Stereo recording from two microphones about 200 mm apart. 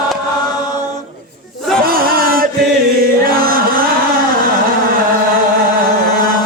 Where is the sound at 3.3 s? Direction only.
45° right (ahead or behind).